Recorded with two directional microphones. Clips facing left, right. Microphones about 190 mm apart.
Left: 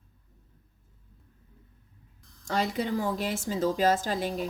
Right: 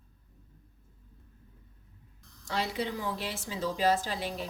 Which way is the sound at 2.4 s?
50° left (ahead or behind).